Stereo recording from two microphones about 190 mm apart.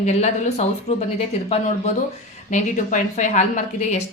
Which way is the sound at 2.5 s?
40° left (ahead or behind).